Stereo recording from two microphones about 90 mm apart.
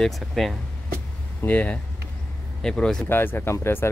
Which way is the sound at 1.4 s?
15° left (ahead or behind).